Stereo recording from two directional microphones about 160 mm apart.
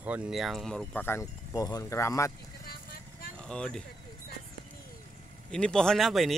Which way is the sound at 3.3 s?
5° left (ahead or behind).